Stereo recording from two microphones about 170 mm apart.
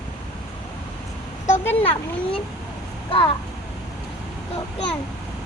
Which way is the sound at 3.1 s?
35° left (ahead or behind).